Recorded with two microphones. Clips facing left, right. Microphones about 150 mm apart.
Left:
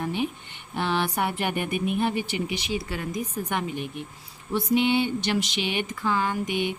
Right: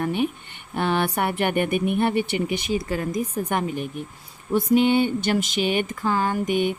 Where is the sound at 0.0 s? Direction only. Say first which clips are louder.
Right 4 dB; 55° right (ahead or behind).